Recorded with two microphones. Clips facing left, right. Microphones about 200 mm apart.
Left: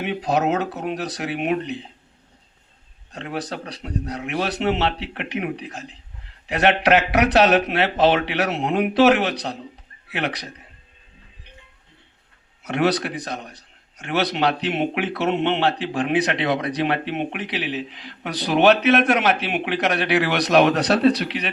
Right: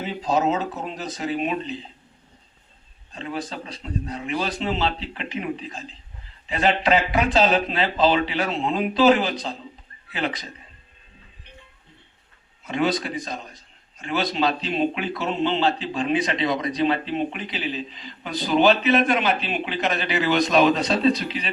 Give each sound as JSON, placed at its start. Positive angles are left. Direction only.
{"t": 0.0, "sound": "a man's voice", "side_deg": 70}
{"t": 3.1, "sound": "a man's voice", "side_deg": 70}
{"t": 12.6, "sound": "a man's voice", "side_deg": 75}